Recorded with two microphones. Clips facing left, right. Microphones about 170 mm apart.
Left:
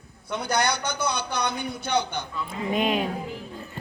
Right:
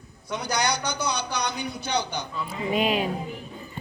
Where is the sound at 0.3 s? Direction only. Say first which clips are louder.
Left 1 dB; 55° left (ahead or behind).